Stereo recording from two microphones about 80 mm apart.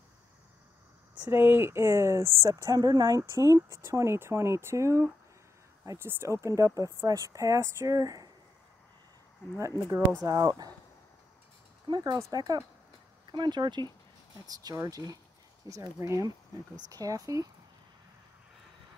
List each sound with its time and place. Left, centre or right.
1.3 s a woman's voice: right
6.0 s a woman's voice: right
10.2 s speech: right
11.9 s speech: right
12.3 s speech: right
13.3 s speech: right
14.4 s speech: right
15.7 s speech: right